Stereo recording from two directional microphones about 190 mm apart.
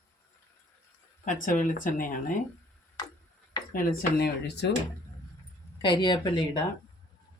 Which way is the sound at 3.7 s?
55° left (ahead or behind).